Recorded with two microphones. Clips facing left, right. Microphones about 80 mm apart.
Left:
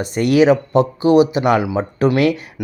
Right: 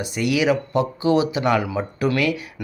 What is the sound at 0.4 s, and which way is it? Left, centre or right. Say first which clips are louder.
Speech: left 6 dB; left.